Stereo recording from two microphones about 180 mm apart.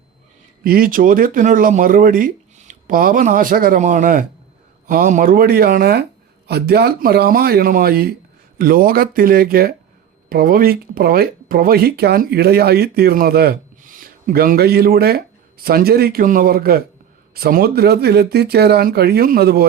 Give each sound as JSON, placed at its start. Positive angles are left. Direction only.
{"t": 0.6, "sound": "speech", "side_deg": -55}